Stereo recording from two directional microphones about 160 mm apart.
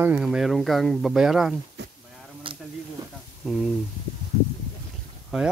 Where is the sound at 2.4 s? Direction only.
30° right (ahead or behind).